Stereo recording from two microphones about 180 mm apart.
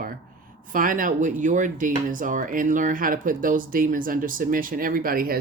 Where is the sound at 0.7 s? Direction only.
50° right (ahead or behind).